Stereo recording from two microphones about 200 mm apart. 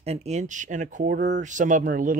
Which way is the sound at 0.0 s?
30° right (ahead or behind).